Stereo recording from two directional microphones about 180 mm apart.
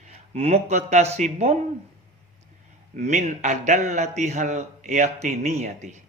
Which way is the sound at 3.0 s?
40° right (ahead or behind).